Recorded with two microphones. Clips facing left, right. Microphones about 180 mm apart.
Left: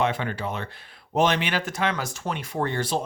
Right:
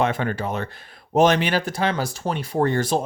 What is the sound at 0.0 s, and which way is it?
Speech, 45° right (ahead or behind).